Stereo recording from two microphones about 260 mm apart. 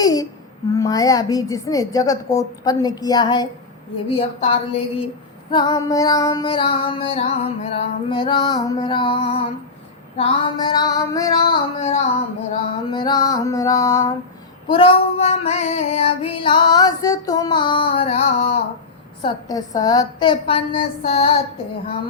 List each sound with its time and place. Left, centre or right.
0.0 s a sound: centre
0.7 s a child's voice: centre
4.2 s music: left
10.2 s a child's voice: centre
14.7 s music: left
19.2 s a child's voice: centre